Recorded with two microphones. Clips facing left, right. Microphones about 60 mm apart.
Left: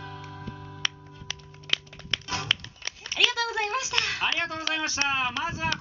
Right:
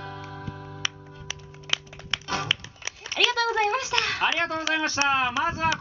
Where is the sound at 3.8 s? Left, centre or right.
Centre.